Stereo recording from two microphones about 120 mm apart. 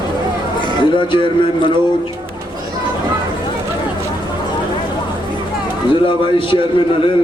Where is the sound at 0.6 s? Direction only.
45° left (ahead or behind).